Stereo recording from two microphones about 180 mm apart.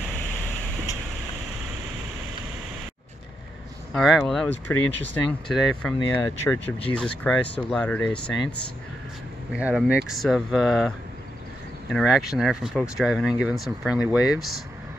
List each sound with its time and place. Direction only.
3.9 s speech: centre (ahead or behind)
5.5 s speech: centre (ahead or behind)
6.1 s speech: 15° left (ahead or behind)
9.5 s speech: 5° right (ahead or behind)
11.9 s speech: centre (ahead or behind)